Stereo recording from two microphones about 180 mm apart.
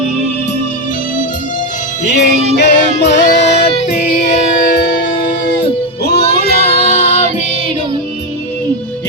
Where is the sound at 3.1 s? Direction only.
40° left (ahead or behind).